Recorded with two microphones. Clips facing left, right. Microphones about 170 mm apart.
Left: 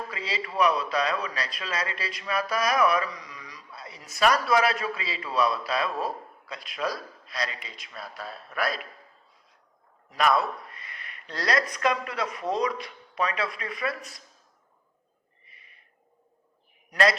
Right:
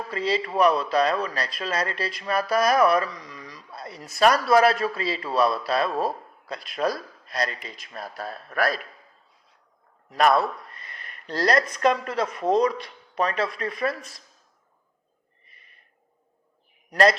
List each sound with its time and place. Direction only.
0.1 s a man's voice: 45° right (ahead or behind)
10.1 s a man's voice: 45° right (ahead or behind)
10.8 s a sound: 40° right (ahead or behind)
11.9 s a man's voice: 45° right (ahead or behind)
16.9 s a man's voice: 45° right (ahead or behind)